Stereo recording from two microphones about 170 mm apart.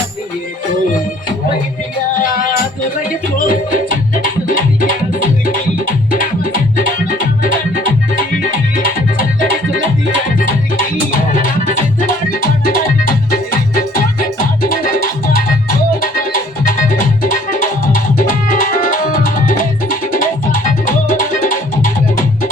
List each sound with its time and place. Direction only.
3.4 s music: 55° left (ahead or behind)
6.1 s music: 55° left (ahead or behind)
8.7 s music: 55° left (ahead or behind)
11.3 s music: 50° left (ahead or behind)
16.0 s music: 55° left (ahead or behind)